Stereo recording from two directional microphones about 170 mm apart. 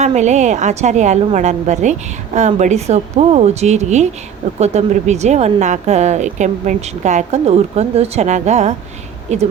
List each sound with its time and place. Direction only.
0.0 s a woman's voice: 40° right (ahead or behind)